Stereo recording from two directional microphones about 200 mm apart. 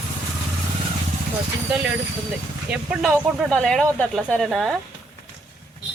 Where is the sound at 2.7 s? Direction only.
5° right (ahead or behind).